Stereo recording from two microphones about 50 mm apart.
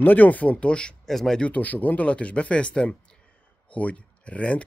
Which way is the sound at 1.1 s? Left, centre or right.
Centre.